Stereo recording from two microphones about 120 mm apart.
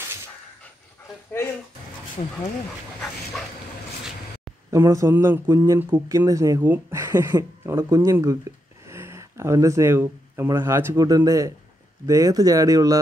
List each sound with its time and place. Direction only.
2.2 s speech: 60° left (ahead or behind)
4.6 s a man's voice: 25° right (ahead or behind)
11.0 s a man's voice: 30° right (ahead or behind)